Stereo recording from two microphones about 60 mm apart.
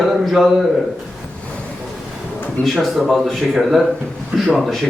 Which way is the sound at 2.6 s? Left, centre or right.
Left.